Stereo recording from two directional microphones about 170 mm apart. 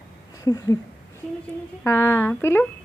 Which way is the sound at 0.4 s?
20° left (ahead or behind).